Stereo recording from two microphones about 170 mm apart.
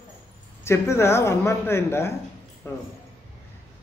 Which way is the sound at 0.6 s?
15° left (ahead or behind).